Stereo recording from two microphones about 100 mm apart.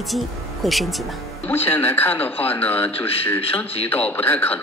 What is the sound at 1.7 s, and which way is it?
Speech, 20° left (ahead or behind).